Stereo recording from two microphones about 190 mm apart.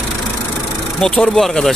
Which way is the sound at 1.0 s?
5° left (ahead or behind).